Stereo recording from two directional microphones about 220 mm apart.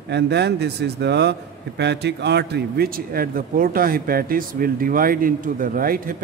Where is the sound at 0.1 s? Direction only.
50° right (ahead or behind).